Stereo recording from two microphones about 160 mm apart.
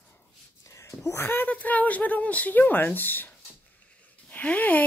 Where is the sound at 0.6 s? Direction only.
20° left (ahead or behind).